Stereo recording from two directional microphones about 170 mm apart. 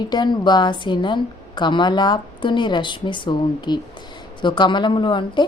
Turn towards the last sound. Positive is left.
turn(degrees=30)  # may be behind; listen again after turning